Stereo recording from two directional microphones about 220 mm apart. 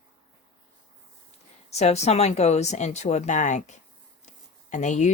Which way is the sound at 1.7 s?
30° left (ahead or behind).